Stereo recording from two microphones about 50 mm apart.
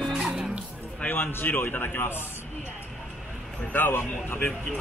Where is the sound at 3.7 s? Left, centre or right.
Left.